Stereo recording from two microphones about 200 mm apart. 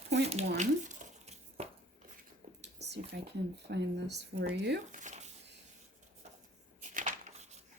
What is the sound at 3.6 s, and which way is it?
Speech, 60° right (ahead or behind).